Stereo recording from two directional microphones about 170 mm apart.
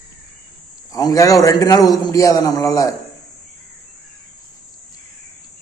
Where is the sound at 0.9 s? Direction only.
20° left (ahead or behind).